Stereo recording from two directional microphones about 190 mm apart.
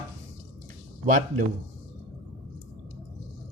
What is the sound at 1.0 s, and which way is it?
Speech, 40° right (ahead or behind).